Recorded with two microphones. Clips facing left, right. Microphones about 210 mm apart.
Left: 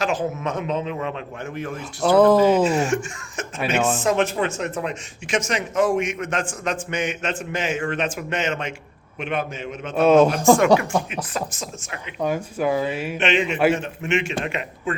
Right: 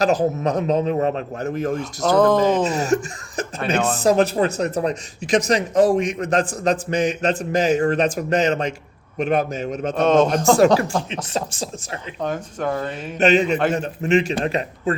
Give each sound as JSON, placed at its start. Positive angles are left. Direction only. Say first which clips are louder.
{"t": 0.0, "sound": "speech", "louder": "right 5 dB", "side_deg": -40}
{"t": 1.8, "sound": "speech", "louder": "left 2 dB", "side_deg": 5}
{"t": 2.6, "sound": "speech", "louder": "right 1 dB", "side_deg": -40}
{"t": 9.9, "sound": "speech", "louder": "left 2 dB", "side_deg": 5}
{"t": 10.8, "sound": "speech", "louder": "right 1 dB", "side_deg": -30}
{"t": 12.2, "sound": "speech", "louder": "left 2 dB", "side_deg": 10}
{"t": 13.1, "sound": "speech", "louder": "right 6 dB", "side_deg": -40}